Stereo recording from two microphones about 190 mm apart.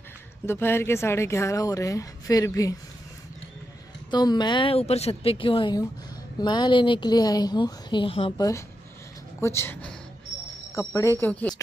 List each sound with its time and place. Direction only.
0.5 s speech: 10° left (ahead or behind)
4.1 s a woman's voice: 20° left (ahead or behind)
9.4 s speech: 15° left (ahead or behind)